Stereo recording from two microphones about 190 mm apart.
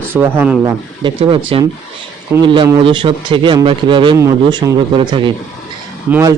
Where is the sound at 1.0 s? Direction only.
25° right (ahead or behind).